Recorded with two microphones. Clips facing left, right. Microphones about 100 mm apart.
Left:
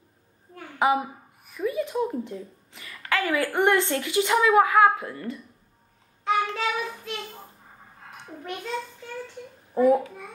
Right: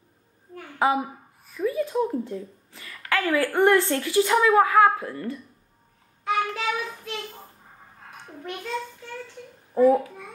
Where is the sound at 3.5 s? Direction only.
20° left (ahead or behind).